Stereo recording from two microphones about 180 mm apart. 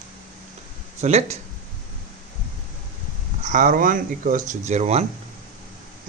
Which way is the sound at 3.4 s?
45° right (ahead or behind).